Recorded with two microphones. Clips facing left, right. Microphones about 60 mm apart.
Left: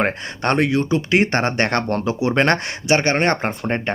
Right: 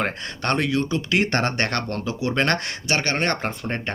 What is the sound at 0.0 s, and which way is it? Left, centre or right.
Speech, left.